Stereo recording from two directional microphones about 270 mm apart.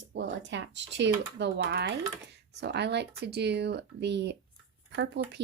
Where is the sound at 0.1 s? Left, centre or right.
Right.